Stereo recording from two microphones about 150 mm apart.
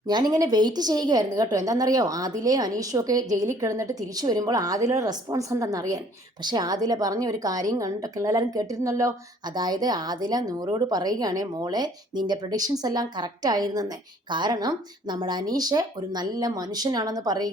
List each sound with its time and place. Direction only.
0.1 s a woman's voice: 25° right (ahead or behind)